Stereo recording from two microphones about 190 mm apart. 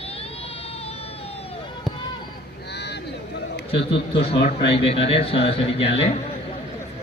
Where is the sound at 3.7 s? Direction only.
30° left (ahead or behind).